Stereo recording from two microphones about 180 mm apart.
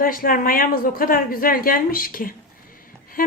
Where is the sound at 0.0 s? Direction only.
50° left (ahead or behind).